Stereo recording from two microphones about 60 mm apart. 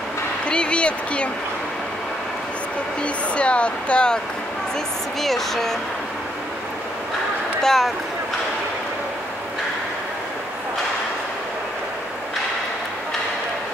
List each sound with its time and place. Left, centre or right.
0.5 s speech: centre
3.0 s speech: centre
5.2 s speech: centre
7.6 s speech: centre